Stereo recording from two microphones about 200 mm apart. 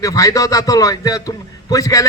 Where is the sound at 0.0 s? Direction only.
15° left (ahead or behind).